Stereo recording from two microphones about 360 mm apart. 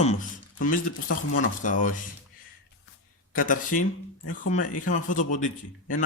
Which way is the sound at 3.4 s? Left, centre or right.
Left.